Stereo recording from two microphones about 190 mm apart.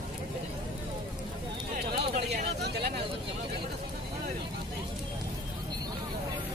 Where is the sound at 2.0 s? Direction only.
60° right (ahead or behind).